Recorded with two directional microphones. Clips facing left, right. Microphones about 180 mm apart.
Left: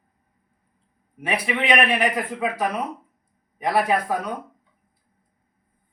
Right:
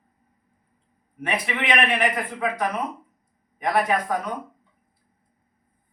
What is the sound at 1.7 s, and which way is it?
Speech, 10° left (ahead or behind).